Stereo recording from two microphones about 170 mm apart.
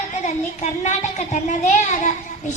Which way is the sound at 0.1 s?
45° left (ahead or behind).